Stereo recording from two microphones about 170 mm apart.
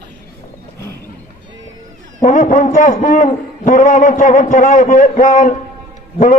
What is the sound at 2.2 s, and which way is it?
A man's voice, 50° left (ahead or behind).